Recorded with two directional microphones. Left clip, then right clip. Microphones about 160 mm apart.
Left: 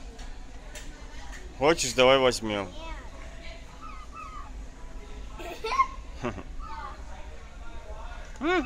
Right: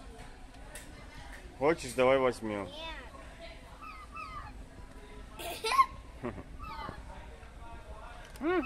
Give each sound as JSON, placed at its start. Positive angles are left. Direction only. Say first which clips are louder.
{"t": 1.6, "sound": "speech", "louder": "left 6 dB", "side_deg": 20}
{"t": 5.5, "sound": "a sound", "louder": "left 1 dB", "side_deg": -5}
{"t": 6.2, "sound": "speech", "louder": "left 7 dB", "side_deg": 25}
{"t": 8.4, "sound": "speech", "louder": "left 5 dB", "side_deg": 15}